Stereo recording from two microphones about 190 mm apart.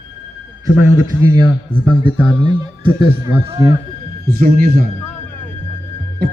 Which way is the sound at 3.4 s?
25° right (ahead or behind).